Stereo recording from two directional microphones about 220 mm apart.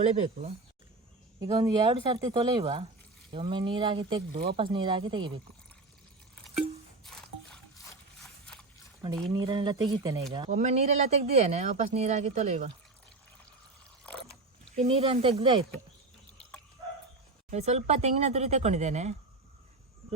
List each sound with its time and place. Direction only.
0.0 s speech: 30° right (ahead or behind)
1.4 s speech: 15° right (ahead or behind)
4.3 s speech: 45° right (ahead or behind)
4.5 s speech: 20° right (ahead or behind)
9.3 s speech: 20° right (ahead or behind)
14.8 s speech: 25° right (ahead or behind)
17.5 s speech: 30° right (ahead or behind)